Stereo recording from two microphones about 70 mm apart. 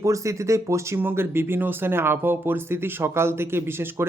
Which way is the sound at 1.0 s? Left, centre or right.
Right.